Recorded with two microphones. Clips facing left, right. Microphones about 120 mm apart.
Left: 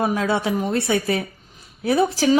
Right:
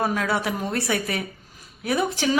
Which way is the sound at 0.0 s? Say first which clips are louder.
Left 3 dB; 20° left (ahead or behind).